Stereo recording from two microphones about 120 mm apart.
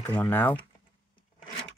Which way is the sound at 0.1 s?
15° left (ahead or behind).